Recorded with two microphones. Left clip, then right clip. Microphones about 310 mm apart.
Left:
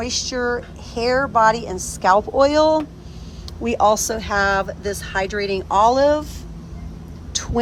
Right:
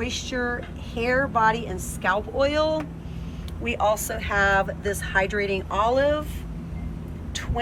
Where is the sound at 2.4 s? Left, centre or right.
Left.